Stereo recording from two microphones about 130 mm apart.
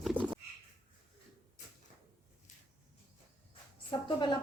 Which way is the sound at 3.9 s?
35° left (ahead or behind).